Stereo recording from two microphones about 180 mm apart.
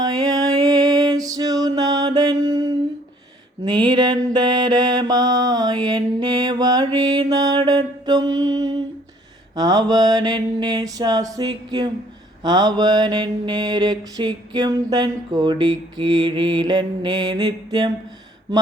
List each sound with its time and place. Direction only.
0.0 s music: 20° right (ahead or behind)
3.6 s mantra: 25° right (ahead or behind)